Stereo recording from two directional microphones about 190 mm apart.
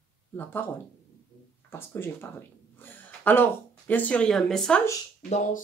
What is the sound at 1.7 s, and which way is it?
Speech, 10° left (ahead or behind).